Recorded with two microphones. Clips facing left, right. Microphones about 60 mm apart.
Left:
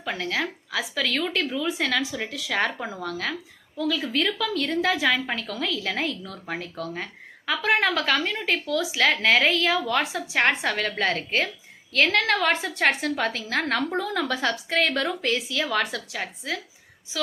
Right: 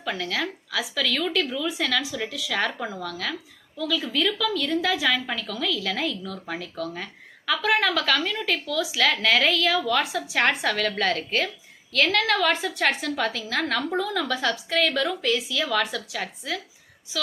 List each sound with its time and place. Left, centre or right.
0.0 s a woman's voice: left